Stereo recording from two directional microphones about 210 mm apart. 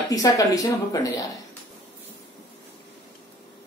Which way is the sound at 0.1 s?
15° left (ahead or behind).